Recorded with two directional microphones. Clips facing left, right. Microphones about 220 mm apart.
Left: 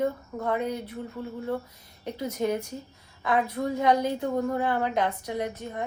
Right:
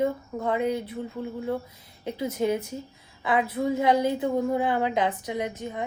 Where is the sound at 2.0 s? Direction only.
10° right (ahead or behind).